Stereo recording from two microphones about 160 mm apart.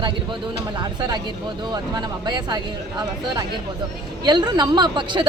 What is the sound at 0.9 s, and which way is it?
A woman's voice, 25° right (ahead or behind).